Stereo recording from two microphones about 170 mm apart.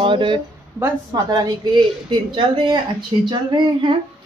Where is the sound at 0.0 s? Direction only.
30° right (ahead or behind).